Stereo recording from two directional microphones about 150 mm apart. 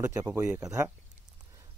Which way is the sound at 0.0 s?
20° right (ahead or behind).